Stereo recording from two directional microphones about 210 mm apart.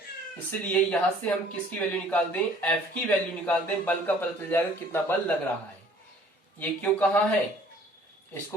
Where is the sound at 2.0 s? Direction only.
5° left (ahead or behind).